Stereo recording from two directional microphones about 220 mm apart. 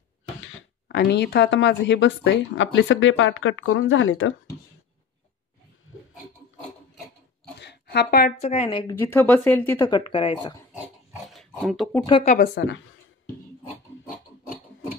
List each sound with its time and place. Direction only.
0.8 s a woman's voice: 50° left (ahead or behind)
5.9 s pig: 70° left (ahead or behind)
7.5 s a sound: 50° left (ahead or behind)
8.4 s a woman's voice: 25° left (ahead or behind)
8.9 s speech: 10° left (ahead or behind)
11.2 s dog: centre (ahead or behind)
12.3 s a woman's voice: 40° left (ahead or behind)
13.7 s pig: 35° left (ahead or behind)